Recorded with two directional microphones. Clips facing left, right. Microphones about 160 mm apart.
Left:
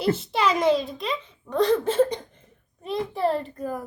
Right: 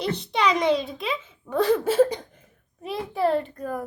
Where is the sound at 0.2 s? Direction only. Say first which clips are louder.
Even; centre (ahead or behind).